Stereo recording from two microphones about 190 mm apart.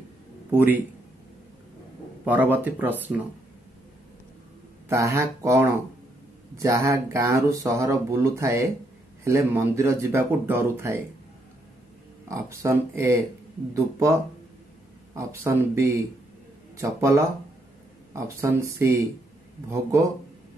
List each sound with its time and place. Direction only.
0.5 s speech: 10° right (ahead or behind)
2.2 s speech: 10° right (ahead or behind)
4.8 s speech: 15° right (ahead or behind)
12.3 s speech: 15° right (ahead or behind)
15.1 s speech: 15° right (ahead or behind)